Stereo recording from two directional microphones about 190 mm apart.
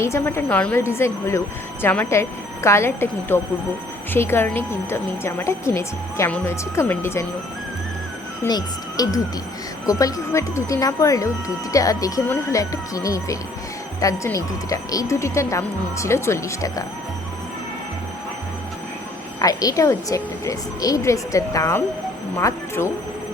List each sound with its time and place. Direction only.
0.0 s speech: 15° left (ahead or behind)
8.4 s speech: 20° left (ahead or behind)
19.4 s speech: 20° left (ahead or behind)